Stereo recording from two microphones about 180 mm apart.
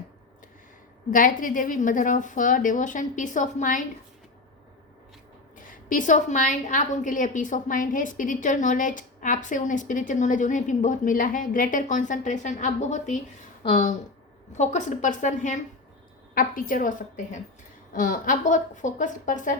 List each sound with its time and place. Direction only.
1.1 s a woman's voice: 50° left (ahead or behind)
5.5 s a woman's voice: 45° left (ahead or behind)